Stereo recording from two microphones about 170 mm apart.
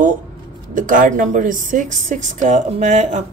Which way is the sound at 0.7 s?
50° right (ahead or behind).